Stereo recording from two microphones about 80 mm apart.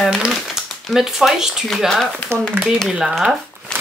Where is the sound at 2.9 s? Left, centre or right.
Centre.